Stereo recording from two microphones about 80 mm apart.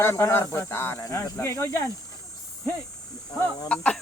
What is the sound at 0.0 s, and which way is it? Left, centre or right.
Speech, left.